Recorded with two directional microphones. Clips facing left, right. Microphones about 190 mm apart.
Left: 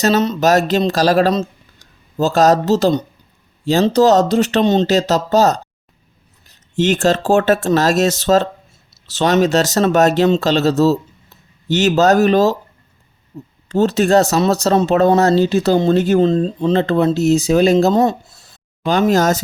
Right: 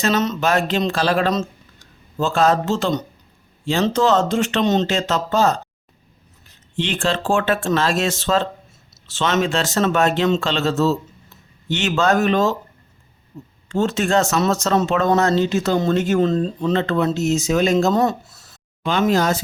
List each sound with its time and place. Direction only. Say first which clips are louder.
0.0 s speech: left 5 dB; 35° left (ahead or behind)
6.7 s speech: left 7 dB; 45° left (ahead or behind)
13.7 s speech: left 6 dB; 35° left (ahead or behind)
18.9 s speech: left 4 dB; 40° left (ahead or behind)